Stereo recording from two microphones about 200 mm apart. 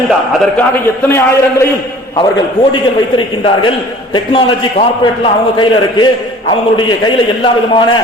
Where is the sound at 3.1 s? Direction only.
25° left (ahead or behind).